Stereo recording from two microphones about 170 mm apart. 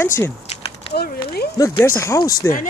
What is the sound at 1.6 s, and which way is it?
Speech, 15° left (ahead or behind).